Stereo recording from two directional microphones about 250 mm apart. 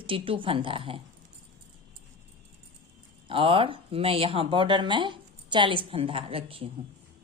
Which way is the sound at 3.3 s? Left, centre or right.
Right.